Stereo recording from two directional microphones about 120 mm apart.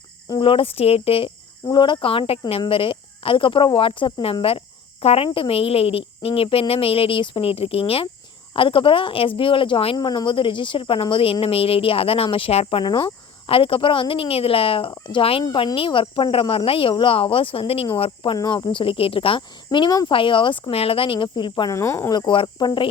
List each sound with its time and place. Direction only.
0.3 s speech: 45° left (ahead or behind)
1.6 s speech: 40° left (ahead or behind)
12.8 s speech: 35° left (ahead or behind)
21.7 s speech: 25° left (ahead or behind)
22.1 s speech: 40° left (ahead or behind)